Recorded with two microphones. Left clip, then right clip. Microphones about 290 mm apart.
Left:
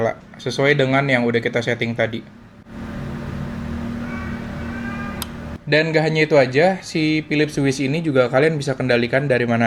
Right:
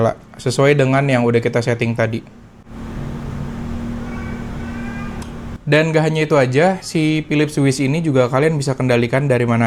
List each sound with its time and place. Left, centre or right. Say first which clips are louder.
0.0 s speech: right 4 dB; right
5.6 s speech: right 2 dB; right